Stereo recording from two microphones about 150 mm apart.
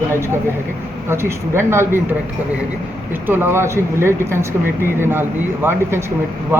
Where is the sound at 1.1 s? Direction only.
15° right (ahead or behind).